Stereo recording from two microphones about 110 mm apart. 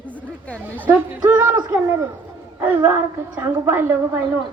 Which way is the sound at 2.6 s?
20° right (ahead or behind).